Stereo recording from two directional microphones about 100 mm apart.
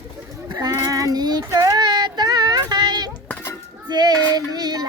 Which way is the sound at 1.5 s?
35° right (ahead or behind).